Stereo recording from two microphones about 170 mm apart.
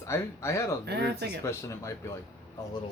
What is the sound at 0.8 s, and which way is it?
Speech, 80° right.